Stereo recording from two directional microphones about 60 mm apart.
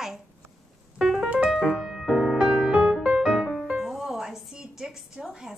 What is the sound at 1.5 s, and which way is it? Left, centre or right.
Music, centre.